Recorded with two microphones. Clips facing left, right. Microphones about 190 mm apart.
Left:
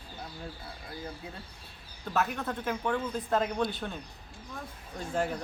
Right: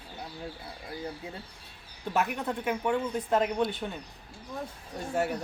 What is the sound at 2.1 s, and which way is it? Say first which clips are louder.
Speech: right 1 dB; 15° right (ahead or behind).